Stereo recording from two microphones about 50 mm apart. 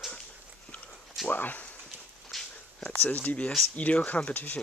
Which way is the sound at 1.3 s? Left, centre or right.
Left.